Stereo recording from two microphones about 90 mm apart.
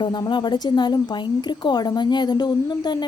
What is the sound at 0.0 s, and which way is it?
A woman's voice, 55° left (ahead or behind).